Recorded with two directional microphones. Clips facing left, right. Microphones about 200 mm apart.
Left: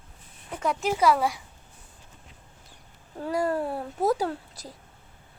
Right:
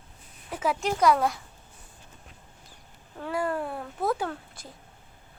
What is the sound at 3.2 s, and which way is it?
A child's voice, 40° left (ahead or behind).